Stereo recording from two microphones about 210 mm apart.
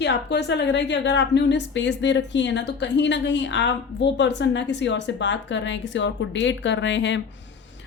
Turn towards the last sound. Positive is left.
turn(degrees=55)  # may be behind; listen again after turning